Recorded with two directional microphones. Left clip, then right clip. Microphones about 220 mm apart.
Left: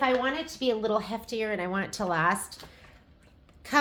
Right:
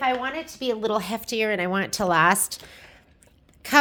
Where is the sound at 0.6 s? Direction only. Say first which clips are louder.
Right 2 dB; 50° right (ahead or behind).